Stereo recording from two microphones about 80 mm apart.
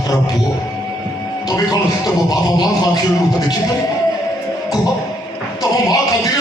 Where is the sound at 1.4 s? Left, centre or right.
Left.